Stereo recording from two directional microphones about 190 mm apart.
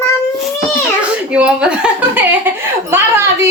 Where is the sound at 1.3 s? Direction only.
5° right (ahead or behind).